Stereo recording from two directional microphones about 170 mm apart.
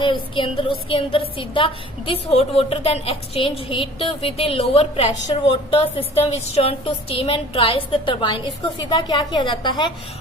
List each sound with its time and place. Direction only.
0.0 s a woman's voice: 30° left (ahead or behind)